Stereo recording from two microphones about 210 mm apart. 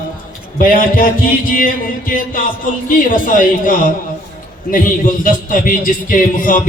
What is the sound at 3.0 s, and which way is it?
A man's voice, 40° left (ahead or behind).